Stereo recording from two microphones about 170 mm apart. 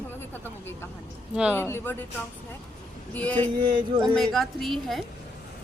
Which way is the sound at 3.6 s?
25° right (ahead or behind).